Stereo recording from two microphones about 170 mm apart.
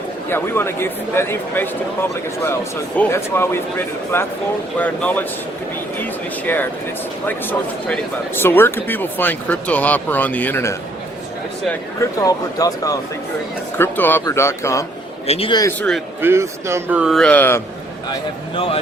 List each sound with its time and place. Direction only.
0.3 s speech: 15° left (ahead or behind)
12.2 s speech: 20° left (ahead or behind)
15.3 s speech: 30° left (ahead or behind)
16.2 s a man's voice: 15° right (ahead or behind)
17.0 s mantra: centre (ahead or behind)
18.1 s speech: 30° left (ahead or behind)